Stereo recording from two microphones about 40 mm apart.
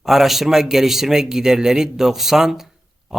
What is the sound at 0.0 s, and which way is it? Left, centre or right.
Speech, centre.